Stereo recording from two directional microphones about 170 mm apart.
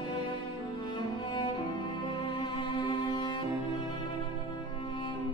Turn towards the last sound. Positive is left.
turn(degrees=25)  # may be behind; listen again after turning